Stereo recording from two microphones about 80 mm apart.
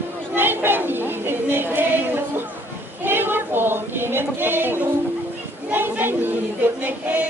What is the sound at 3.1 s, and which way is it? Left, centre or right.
Female singing, right.